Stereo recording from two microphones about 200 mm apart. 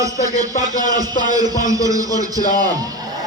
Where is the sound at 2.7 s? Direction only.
20° right (ahead or behind).